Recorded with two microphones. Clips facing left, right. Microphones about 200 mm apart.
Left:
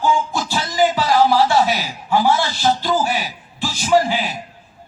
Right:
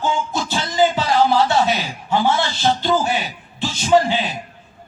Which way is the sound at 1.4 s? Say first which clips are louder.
Left 1 dB; 25° right (ahead or behind).